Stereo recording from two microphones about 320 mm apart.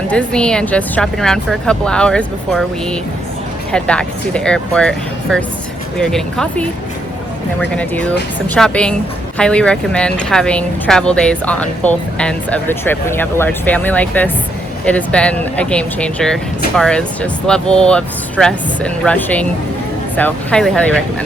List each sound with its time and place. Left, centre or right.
0.1 s speech: centre